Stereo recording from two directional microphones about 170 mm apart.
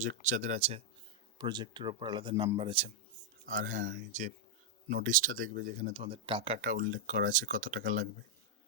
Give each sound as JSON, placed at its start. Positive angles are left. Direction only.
{"t": 0.0, "sound": "speech", "side_deg": -45}
{"t": 1.4, "sound": "a man's voice", "side_deg": -25}
{"t": 3.4, "sound": "speech", "side_deg": -50}
{"t": 6.6, "sound": "speech", "side_deg": -50}